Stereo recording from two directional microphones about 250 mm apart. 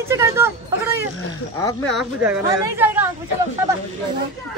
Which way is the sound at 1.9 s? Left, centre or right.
Centre.